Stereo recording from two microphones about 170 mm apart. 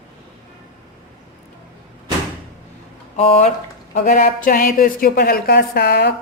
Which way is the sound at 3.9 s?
55° left (ahead or behind).